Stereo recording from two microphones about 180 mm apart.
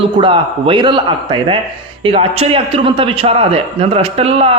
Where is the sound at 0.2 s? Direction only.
25° right (ahead or behind).